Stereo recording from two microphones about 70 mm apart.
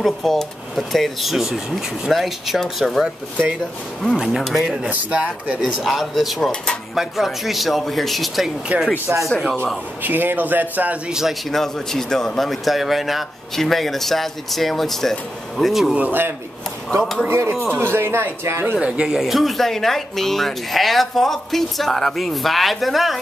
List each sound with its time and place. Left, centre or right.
0.0 s a man's voice: centre
4.2 s a man's voice: centre
4.8 s speech: centre
5.6 s a man's voice: centre
8.7 s a man's voice: right
9.0 s speech: right
10.0 s a man's voice: right
11.1 s speech: centre
11.5 s a man's voice: centre
16.1 s speech: right
18.8 s a man's voice: centre